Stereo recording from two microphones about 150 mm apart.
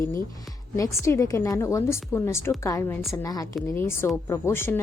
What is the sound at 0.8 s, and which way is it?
A woman's voice, 20° left (ahead or behind).